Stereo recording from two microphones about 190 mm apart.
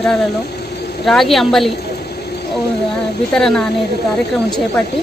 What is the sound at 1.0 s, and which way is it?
Speech, centre (ahead or behind).